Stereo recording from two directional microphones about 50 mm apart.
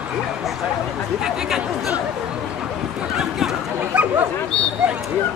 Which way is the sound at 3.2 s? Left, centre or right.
Centre.